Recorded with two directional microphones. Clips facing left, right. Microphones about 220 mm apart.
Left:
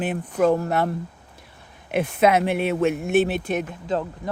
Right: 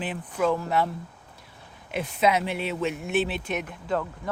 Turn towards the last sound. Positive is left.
turn(degrees=20)  # may be behind; listen again after turning